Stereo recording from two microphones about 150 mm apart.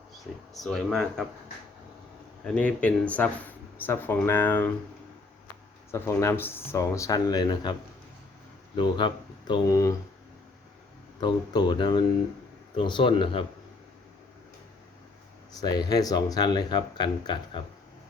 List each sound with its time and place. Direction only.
0.5 s speech: centre (ahead or behind)
2.4 s speech: 5° left (ahead or behind)
5.9 s speech: 20° left (ahead or behind)
11.2 s speech: 30° left (ahead or behind)
15.6 s speech: 25° left (ahead or behind)